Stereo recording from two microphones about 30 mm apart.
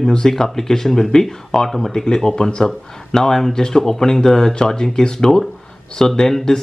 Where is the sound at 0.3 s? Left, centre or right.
Centre.